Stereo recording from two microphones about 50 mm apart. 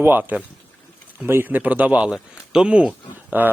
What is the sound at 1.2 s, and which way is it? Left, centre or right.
Speech, right.